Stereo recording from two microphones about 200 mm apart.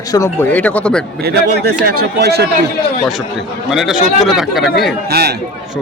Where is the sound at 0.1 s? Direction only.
15° left (ahead or behind).